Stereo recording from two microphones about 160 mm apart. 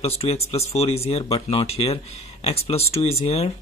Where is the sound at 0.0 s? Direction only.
40° left (ahead or behind).